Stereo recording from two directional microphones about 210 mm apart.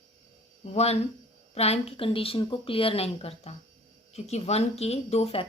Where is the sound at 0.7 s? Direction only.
30° left (ahead or behind).